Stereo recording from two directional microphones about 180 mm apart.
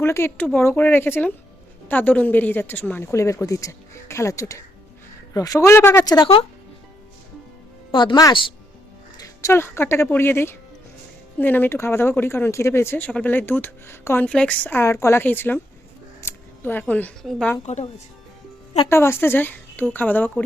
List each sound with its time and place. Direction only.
0.0 s speech: 15° left (ahead or behind)
7.9 s speech: 25° left (ahead or behind)
9.1 s speech: 15° left (ahead or behind)
16.2 s scissors: 10° left (ahead or behind)
16.8 s a woman's voice: 5° left (ahead or behind)
17.6 s speech: 40° left (ahead or behind)
18.9 s speech: 15° left (ahead or behind)